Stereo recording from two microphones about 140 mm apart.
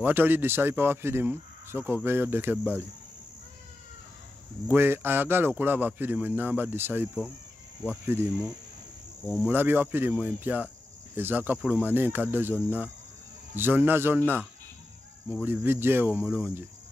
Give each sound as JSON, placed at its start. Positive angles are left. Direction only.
{"t": 0.0, "sound": "a man's voice", "side_deg": -15}
{"t": 4.6, "sound": "a man's voice", "side_deg": -15}
{"t": 9.3, "sound": "a man's voice", "side_deg": -10}
{"t": 15.4, "sound": "a man's voice", "side_deg": -15}